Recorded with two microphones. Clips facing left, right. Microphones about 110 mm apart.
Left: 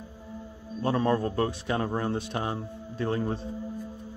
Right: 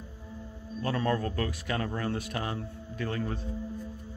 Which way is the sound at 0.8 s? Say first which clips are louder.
Left 4 dB; 25° left (ahead or behind).